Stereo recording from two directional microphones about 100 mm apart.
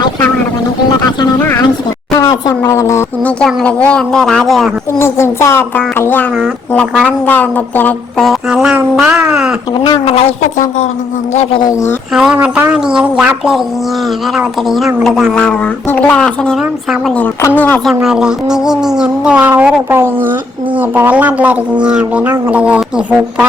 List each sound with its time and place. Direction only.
2.1 s a sound: 35° left (ahead or behind)
3.4 s a woman's voice: 10° left (ahead or behind)
4.9 s speech: 25° left (ahead or behind)
7.3 s a woman's voice: 20° left (ahead or behind)
8.2 s a woman's voice: centre (ahead or behind)
9.7 s speech: 50° left (ahead or behind)
10.1 s speech: 75° left (ahead or behind)
11.6 s speech: 30° left (ahead or behind)
12.1 s a woman's voice: 5° right (ahead or behind)
12.4 s a woman's voice: 15° right (ahead or behind)
15.3 s a woman's voice: 10° left (ahead or behind)
17.4 s a woman's voice: 15° left (ahead or behind)
17.8 s speech: 5° right (ahead or behind)